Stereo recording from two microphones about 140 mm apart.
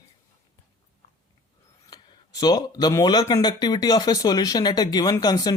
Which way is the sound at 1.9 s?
30° left (ahead or behind).